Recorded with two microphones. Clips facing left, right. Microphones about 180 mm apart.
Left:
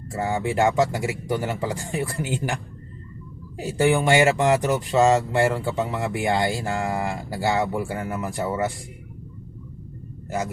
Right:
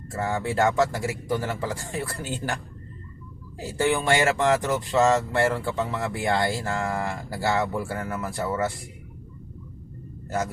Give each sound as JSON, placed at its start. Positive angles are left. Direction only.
{"t": 0.1, "sound": "a man's voice", "side_deg": 20}
{"t": 3.6, "sound": "speech", "side_deg": 20}